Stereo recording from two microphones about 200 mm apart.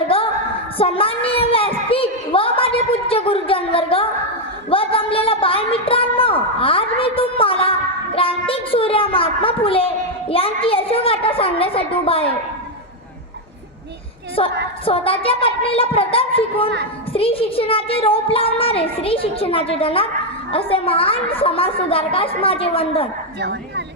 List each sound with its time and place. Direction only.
0.8 s a sound: 30° left (ahead or behind)
4.7 s a woman's voice: 25° left (ahead or behind)
14.4 s a woman's voice: 30° left (ahead or behind)
23.4 s speech: 55° right (ahead or behind)